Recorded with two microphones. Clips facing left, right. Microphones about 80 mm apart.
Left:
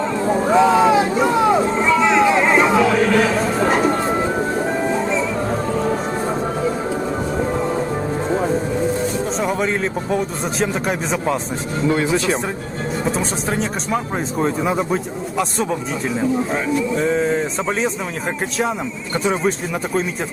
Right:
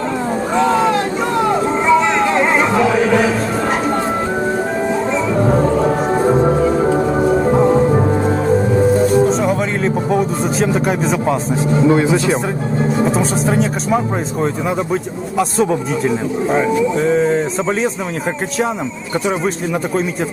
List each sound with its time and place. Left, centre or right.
0.5 s a sound: centre
1.8 s music: centre
9.4 s a sound: centre
10.6 s speech: centre
11.9 s speech: centre
13.1 s speech: centre
19.2 s speech: centre